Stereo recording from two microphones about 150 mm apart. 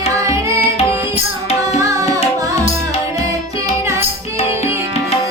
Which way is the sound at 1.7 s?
20° right (ahead or behind).